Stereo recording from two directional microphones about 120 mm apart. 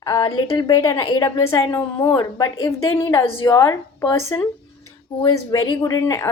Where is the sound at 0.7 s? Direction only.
25° left (ahead or behind).